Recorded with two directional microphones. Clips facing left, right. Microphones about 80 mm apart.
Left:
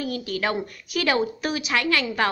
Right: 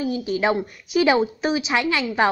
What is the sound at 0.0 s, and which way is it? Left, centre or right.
A woman's voice, centre.